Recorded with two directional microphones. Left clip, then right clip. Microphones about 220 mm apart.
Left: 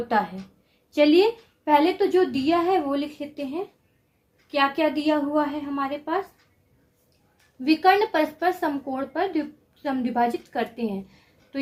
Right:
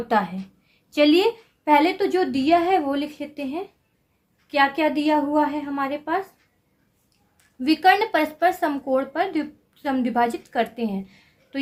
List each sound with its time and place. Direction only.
0.1 s a woman's voice: 25° right (ahead or behind); by 6.2 s 40° right (ahead or behind)
7.6 s a woman's voice: 35° right (ahead or behind)